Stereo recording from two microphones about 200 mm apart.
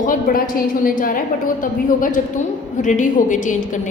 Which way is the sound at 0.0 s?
45° left (ahead or behind).